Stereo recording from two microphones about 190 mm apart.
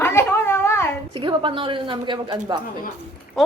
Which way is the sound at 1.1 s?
25° right (ahead or behind).